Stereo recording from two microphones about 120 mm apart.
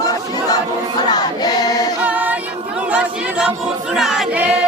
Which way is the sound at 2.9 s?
10° right (ahead or behind).